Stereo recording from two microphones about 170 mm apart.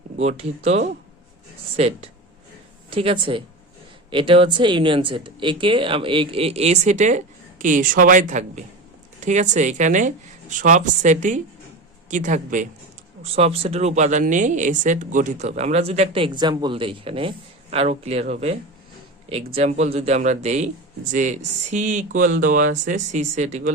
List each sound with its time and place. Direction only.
0.2 s speech: 40° right (ahead or behind)
13.3 s speech: 35° right (ahead or behind)
19.5 s speech: 40° right (ahead or behind)